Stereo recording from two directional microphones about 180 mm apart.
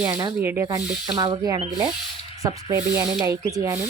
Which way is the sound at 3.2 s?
15° right (ahead or behind).